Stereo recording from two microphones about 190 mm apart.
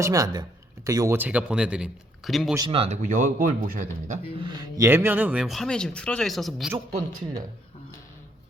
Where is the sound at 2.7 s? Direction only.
30° right (ahead or behind).